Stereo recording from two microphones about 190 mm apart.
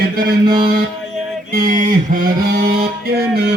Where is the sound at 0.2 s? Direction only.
55° right (ahead or behind).